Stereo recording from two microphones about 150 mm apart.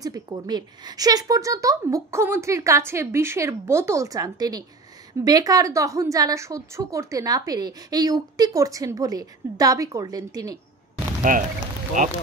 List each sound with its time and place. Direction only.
0.0 s a woman's voice: 25° right (ahead or behind)
11.3 s speech: 65° right (ahead or behind)